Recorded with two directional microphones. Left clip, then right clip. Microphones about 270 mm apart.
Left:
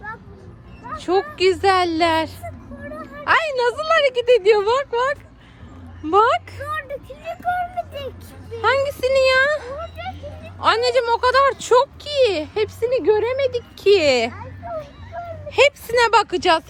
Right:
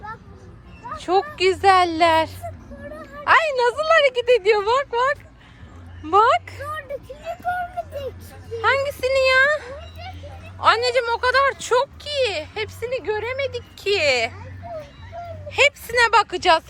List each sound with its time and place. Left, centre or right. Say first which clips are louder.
0.9 s a woman's voice: even; centre
8.6 s speech: left 2 dB; centre
15.1 s a sound: left 3 dB; centre
15.4 s speech: left 2 dB; centre